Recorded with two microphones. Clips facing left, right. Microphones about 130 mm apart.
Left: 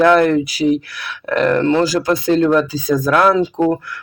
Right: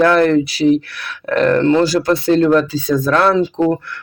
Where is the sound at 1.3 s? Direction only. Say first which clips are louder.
Right 2 dB; 5° left (ahead or behind).